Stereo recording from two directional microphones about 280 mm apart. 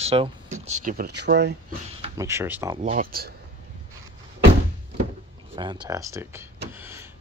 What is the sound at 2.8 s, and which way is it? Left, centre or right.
Speech, right.